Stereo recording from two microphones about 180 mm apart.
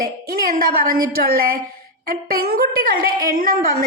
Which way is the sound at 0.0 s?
55° right (ahead or behind).